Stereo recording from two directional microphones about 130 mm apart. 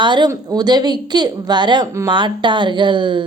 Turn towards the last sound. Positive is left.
turn(degrees=-35)  # may be behind; listen again after turning